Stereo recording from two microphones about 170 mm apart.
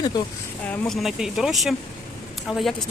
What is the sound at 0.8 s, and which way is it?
Speech, centre (ahead or behind).